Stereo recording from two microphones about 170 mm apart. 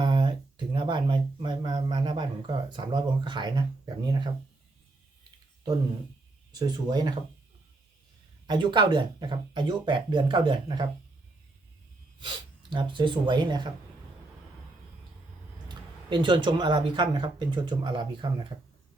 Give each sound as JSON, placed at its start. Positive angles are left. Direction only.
{"t": 0.0, "sound": "speech", "side_deg": -25}
{"t": 6.5, "sound": "speech", "side_deg": -25}
{"t": 8.4, "sound": "speech", "side_deg": -25}
{"t": 12.7, "sound": "speech", "side_deg": -30}
{"t": 15.7, "sound": "speech", "side_deg": -25}